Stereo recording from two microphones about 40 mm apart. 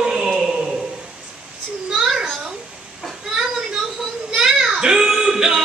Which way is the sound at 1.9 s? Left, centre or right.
Centre.